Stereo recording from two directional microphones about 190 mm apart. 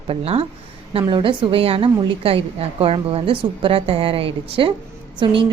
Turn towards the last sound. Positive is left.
turn(degrees=-25)  # may be behind; listen again after turning